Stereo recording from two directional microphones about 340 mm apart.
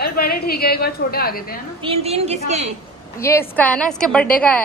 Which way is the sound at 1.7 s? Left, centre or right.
Centre.